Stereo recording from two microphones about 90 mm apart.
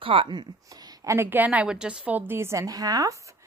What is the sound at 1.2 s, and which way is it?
A woman's voice, 20° right (ahead or behind).